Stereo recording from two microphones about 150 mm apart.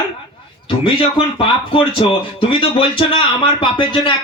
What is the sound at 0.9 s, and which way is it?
Speech, 35° left (ahead or behind).